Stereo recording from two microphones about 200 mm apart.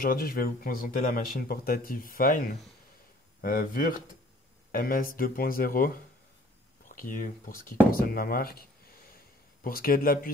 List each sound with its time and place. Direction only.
0.0 s speech: 45° left (ahead or behind)